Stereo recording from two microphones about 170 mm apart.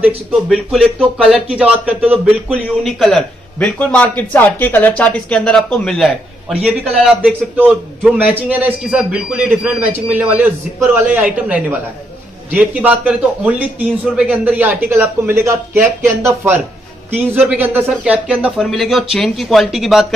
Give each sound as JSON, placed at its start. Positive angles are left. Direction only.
{"t": 0.0, "sound": "speech", "side_deg": 0}
{"t": 2.8, "sound": "a man's voice", "side_deg": 0}